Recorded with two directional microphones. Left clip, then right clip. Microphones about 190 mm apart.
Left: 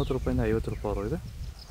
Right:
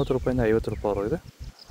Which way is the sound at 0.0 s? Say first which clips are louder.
Right 5 dB; 30° right (ahead or behind).